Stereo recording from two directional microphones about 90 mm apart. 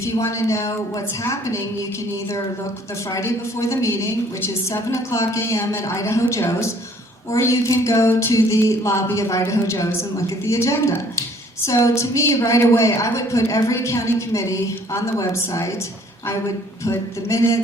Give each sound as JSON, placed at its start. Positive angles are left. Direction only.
{"t": 0.0, "sound": "a woman's voice", "side_deg": 35}
{"t": 3.1, "sound": "a woman's voice", "side_deg": 35}
{"t": 16.8, "sound": "a woman's voice", "side_deg": 35}